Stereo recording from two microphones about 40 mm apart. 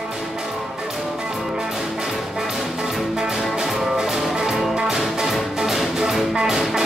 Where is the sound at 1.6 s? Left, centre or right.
Centre.